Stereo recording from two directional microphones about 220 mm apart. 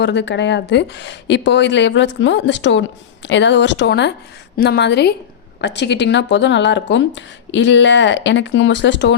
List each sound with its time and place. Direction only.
0.0 s speech: 50° left (ahead or behind)